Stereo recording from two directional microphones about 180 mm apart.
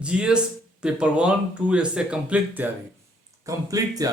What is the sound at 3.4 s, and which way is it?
Speech, 20° right (ahead or behind).